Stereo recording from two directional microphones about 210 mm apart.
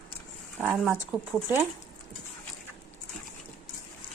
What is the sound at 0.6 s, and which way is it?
Speech, 10° right (ahead or behind).